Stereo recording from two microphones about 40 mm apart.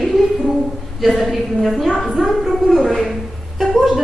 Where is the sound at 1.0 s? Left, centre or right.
Centre.